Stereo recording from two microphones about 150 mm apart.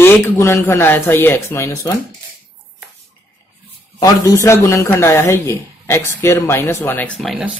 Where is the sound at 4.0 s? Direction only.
20° left (ahead or behind).